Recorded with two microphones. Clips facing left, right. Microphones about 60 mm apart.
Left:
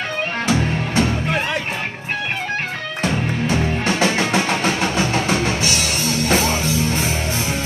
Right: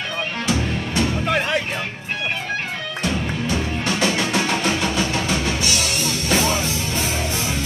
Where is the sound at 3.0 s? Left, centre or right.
Left.